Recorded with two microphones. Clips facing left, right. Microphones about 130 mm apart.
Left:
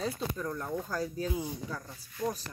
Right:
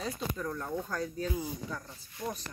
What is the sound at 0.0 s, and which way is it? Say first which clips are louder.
Speech: left 1 dB; centre (ahead or behind).